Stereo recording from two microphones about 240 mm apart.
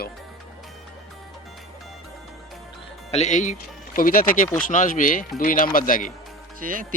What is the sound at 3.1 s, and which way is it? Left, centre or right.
Speech, left.